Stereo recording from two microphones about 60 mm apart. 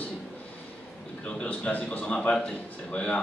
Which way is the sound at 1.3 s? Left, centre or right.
Centre.